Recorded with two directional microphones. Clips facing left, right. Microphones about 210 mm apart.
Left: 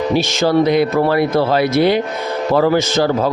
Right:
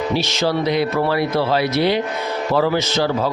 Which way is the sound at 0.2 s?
50° left (ahead or behind).